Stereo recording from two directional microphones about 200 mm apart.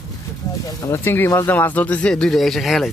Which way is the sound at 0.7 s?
15° left (ahead or behind).